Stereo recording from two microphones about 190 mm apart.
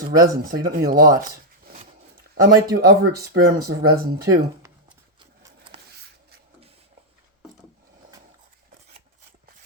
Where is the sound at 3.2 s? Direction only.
55° right (ahead or behind).